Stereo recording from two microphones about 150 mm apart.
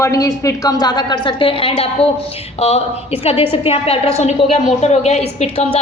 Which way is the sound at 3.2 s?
40° left (ahead or behind).